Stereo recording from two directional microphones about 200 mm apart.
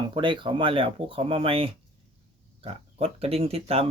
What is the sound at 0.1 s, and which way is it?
Speech, 25° right (ahead or behind).